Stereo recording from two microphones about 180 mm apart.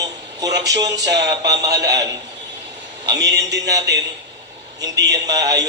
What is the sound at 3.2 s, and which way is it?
Speech, 70° right (ahead or behind).